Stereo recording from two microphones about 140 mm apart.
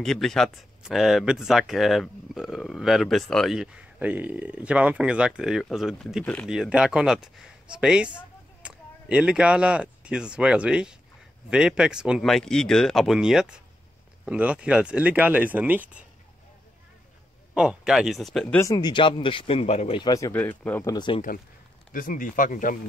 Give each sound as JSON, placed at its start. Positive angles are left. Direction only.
{"t": 0.0, "sound": "speech", "side_deg": 5}
{"t": 17.6, "sound": "speech", "side_deg": -5}
{"t": 18.6, "sound": "speech", "side_deg": 25}
{"t": 20.0, "sound": "speech", "side_deg": 25}
{"t": 20.3, "sound": "speech", "side_deg": 10}
{"t": 20.8, "sound": "speech", "side_deg": 30}
{"t": 21.9, "sound": "speech", "side_deg": 75}